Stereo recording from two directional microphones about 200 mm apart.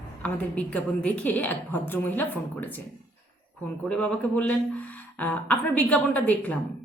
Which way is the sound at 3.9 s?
5° left (ahead or behind).